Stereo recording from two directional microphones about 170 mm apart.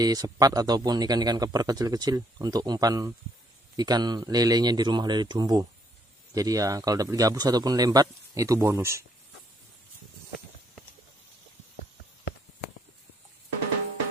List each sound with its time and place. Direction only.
0.0 s a man's voice: 20° right (ahead or behind)